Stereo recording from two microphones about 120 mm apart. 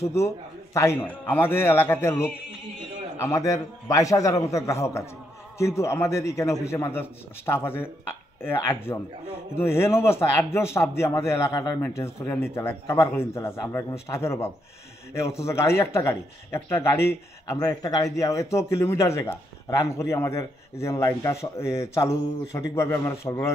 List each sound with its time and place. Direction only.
0.0 s a man's voice: 25° left (ahead or behind)